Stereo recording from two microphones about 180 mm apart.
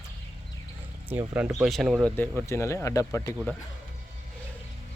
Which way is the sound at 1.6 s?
Centre (ahead or behind).